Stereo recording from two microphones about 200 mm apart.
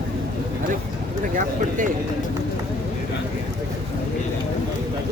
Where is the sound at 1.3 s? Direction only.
40° right (ahead or behind).